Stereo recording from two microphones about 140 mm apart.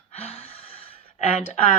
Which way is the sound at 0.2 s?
45° left (ahead or behind).